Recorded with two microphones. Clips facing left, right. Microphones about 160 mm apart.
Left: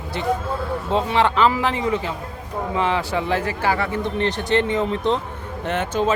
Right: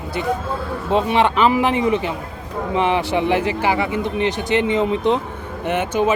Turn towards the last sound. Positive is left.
turn(degrees=-15)  # may be behind; listen again after turning